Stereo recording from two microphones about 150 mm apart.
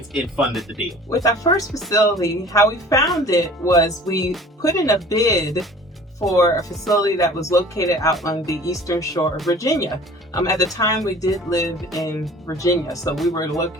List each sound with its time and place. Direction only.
0.1 s speech: 5° right (ahead or behind)
1.1 s speech: 25° left (ahead or behind)
3.0 s speech: centre (ahead or behind)
3.2 s speech: 25° left (ahead or behind)
11.8 s speech: centre (ahead or behind)
12.5 s speech: 25° left (ahead or behind)